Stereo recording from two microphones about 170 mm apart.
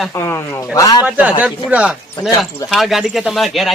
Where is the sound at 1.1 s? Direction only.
5° right (ahead or behind).